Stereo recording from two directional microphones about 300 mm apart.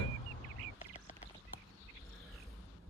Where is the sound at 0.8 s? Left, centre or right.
Left.